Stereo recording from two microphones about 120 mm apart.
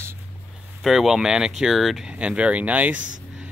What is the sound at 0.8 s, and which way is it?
Speech, centre (ahead or behind).